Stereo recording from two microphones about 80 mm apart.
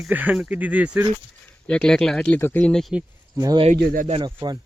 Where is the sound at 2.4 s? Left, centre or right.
Left.